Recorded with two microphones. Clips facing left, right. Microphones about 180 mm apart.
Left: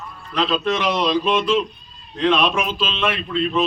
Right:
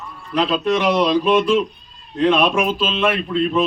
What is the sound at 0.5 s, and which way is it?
Speech, 10° right (ahead or behind).